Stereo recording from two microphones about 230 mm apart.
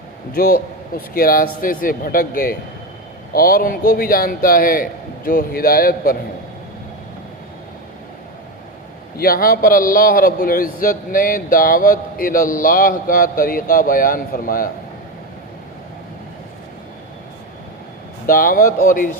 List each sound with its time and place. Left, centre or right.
0.3 s a man's voice: left
9.1 s a man's voice: left
18.3 s a man's voice: left